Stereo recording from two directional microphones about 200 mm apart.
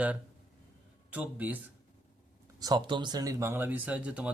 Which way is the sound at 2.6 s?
20° right (ahead or behind).